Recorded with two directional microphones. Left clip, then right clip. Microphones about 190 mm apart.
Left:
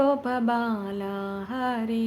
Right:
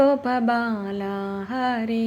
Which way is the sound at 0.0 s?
10° right (ahead or behind).